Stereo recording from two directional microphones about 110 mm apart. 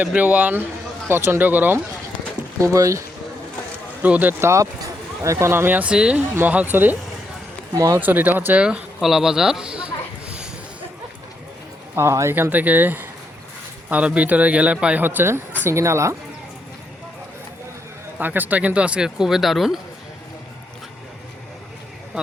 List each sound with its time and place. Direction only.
0.0 s speech: 15° right (ahead or behind)
2.6 s speech: 30° right (ahead or behind)
4.0 s speech: 15° right (ahead or behind)
7.7 s speech: 35° right (ahead or behind)
7.9 s speech: 15° right (ahead or behind)
11.9 s speech: 25° right (ahead or behind)
18.2 s speech: 15° right (ahead or behind)